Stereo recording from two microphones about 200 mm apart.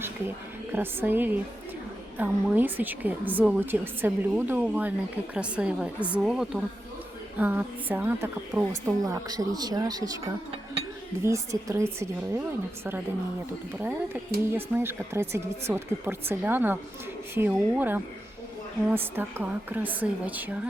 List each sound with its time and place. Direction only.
0.7 s a woman's voice: 10° right (ahead or behind)